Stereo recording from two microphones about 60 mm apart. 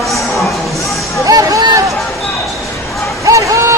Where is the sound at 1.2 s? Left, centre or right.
Right.